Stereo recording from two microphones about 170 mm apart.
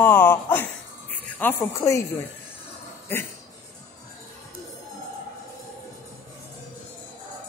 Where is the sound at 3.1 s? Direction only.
15° left (ahead or behind).